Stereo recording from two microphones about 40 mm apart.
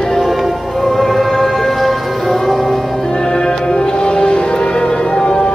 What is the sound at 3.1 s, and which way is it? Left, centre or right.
Music, centre.